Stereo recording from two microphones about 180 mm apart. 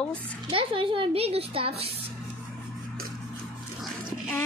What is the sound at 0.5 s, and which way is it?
A woman's voice, 30° right (ahead or behind).